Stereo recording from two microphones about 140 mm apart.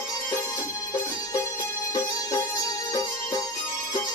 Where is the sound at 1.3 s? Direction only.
25° left (ahead or behind).